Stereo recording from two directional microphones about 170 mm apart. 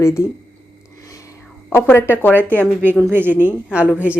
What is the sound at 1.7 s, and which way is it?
Speech, 15° left (ahead or behind).